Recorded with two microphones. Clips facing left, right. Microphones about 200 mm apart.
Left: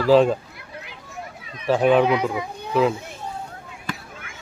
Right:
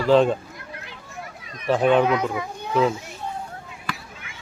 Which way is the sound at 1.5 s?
5° left (ahead or behind).